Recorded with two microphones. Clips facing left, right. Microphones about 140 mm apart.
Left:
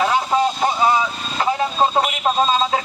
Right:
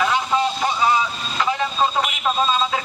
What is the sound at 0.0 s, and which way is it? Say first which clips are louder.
Vehicle: left 2 dB; 40° left (ahead or behind).